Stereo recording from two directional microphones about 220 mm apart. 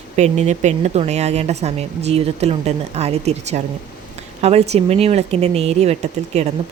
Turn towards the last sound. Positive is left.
turn(degrees=-30)  # may be behind; listen again after turning